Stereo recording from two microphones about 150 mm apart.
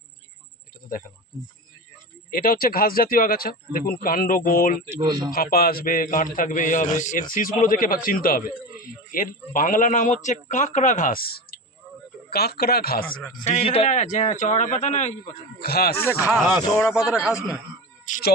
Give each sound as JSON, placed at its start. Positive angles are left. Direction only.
{"t": 2.3, "sound": "speech", "side_deg": 70}
{"t": 5.0, "sound": "speech", "side_deg": -30}
{"t": 5.3, "sound": "a man's voice", "side_deg": 85}
{"t": 7.3, "sound": "a man's voice", "side_deg": 65}
{"t": 13.5, "sound": "a man's voice", "side_deg": 40}
{"t": 15.6, "sound": "speech", "side_deg": 90}
{"t": 16.3, "sound": "a man's voice", "side_deg": 0}
{"t": 18.0, "sound": "speech", "side_deg": 60}